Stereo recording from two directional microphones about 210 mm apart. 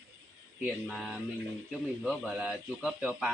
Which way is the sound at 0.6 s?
5° right (ahead or behind).